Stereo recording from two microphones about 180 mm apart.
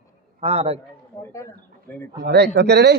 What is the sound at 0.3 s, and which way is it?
Speech, 30° right (ahead or behind).